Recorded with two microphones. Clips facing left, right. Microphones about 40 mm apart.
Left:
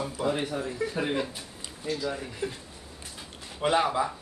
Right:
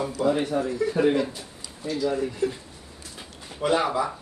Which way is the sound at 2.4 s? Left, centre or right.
Left.